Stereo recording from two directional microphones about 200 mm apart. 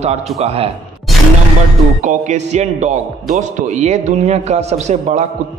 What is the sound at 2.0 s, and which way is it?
A man's voice, 35° right (ahead or behind).